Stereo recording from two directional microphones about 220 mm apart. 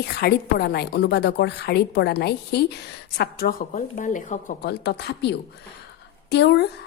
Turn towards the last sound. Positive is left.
turn(degrees=50)  # may be behind; listen again after turning